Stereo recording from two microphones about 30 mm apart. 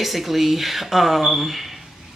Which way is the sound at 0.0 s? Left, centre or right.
Centre.